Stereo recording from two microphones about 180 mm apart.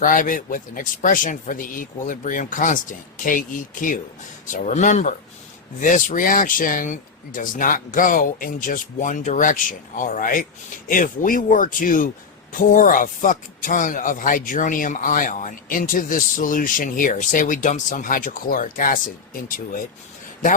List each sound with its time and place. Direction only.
0.0 s speech: 50° left (ahead or behind)